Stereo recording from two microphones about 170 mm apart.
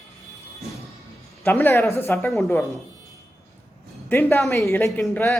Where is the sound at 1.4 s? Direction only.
15° left (ahead or behind).